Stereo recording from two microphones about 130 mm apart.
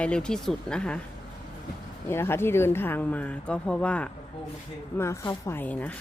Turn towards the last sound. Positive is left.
turn(degrees=10)  # may be behind; listen again after turning